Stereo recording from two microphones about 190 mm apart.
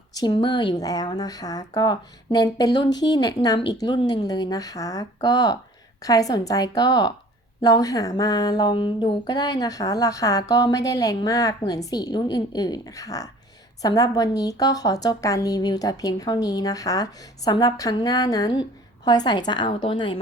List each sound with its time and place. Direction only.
0.1 s a woman's voice: 20° left (ahead or behind)